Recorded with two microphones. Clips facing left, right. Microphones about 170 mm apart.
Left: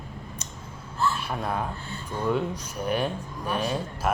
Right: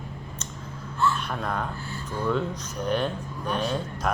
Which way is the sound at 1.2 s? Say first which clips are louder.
Even; 10° left (ahead or behind).